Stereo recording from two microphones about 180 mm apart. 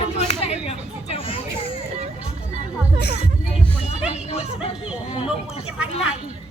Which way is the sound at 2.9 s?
65° left (ahead or behind).